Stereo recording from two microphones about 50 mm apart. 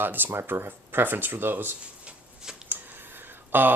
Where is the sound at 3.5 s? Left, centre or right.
Right.